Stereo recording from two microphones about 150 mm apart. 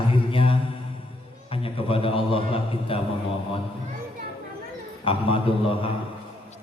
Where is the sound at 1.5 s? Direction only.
40° left (ahead or behind).